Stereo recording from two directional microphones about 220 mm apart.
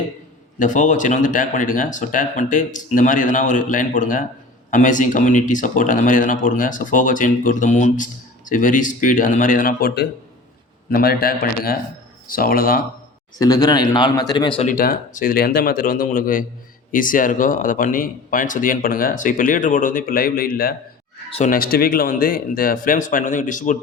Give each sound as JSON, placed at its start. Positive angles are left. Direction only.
{"t": 0.6, "sound": "a man's voice", "side_deg": 35}
{"t": 13.4, "sound": "a man's voice", "side_deg": 15}
{"t": 14.7, "sound": "speech", "side_deg": 40}
{"t": 21.2, "sound": "speech", "side_deg": 25}
{"t": 21.5, "sound": "speech", "side_deg": 40}